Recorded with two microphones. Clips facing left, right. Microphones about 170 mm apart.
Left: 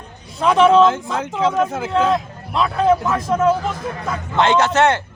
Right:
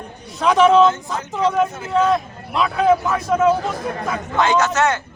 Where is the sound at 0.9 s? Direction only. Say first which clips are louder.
Left 1 dB; 90° left.